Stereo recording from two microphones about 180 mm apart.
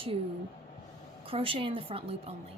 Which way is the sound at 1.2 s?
30° right (ahead or behind).